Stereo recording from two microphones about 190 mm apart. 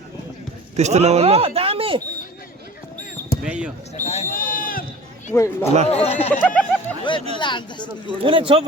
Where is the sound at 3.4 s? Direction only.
5° right (ahead or behind).